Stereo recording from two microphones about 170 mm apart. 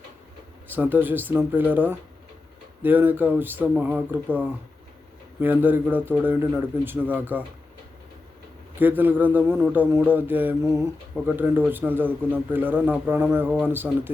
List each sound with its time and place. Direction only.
0.7 s a man's voice: 10° right (ahead or behind)
8.8 s a man's voice: 10° right (ahead or behind)